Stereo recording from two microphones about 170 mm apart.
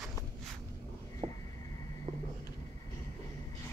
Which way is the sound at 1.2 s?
40° right (ahead or behind).